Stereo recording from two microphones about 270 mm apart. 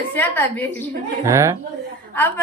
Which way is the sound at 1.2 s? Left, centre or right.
Centre.